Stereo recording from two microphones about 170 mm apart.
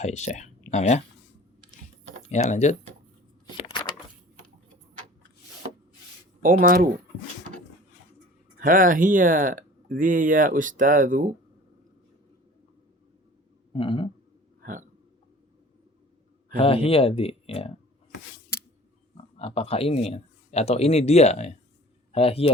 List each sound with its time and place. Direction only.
0.0 s speech: 40° left (ahead or behind)
2.3 s speech: 40° left (ahead or behind)
3.6 s a sound: 30° left (ahead or behind)
6.4 s speech: 55° right (ahead or behind)
8.5 s speech: 55° right (ahead or behind)
13.7 s speech: 30° left (ahead or behind)
14.6 s hiccup: 50° right (ahead or behind)
16.6 s speech: 35° left (ahead or behind)
19.1 s speech: 35° left (ahead or behind)